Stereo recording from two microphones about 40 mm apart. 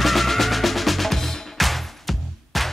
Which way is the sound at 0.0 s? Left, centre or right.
Centre.